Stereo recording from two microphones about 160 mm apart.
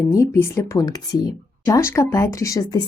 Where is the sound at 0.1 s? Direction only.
20° left (ahead or behind).